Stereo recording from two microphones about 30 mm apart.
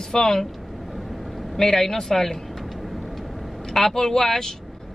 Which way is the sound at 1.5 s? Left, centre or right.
Centre.